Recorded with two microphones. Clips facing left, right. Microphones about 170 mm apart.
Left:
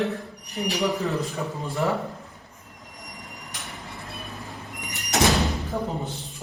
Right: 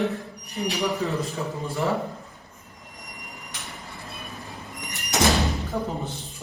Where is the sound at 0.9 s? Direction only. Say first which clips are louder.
Even; centre (ahead or behind).